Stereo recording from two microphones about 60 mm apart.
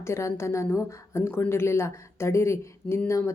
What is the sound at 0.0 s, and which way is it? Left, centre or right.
Speech, left.